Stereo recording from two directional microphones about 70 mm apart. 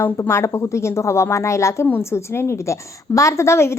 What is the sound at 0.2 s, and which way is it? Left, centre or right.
A woman's voice, left.